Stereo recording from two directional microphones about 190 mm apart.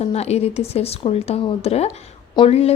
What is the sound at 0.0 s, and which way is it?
A woman's voice, 35° left (ahead or behind).